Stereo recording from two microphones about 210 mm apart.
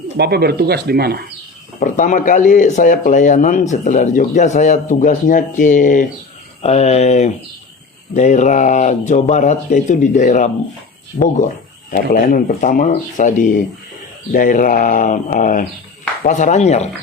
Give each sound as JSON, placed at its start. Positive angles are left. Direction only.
{"t": 0.2, "sound": "speech", "side_deg": -50}
{"t": 1.8, "sound": "speech", "side_deg": 40}